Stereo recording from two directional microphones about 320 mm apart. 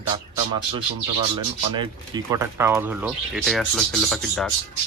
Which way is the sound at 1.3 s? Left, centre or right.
Centre.